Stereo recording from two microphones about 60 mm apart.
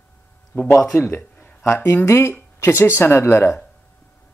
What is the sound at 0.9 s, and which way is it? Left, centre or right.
Speech, left.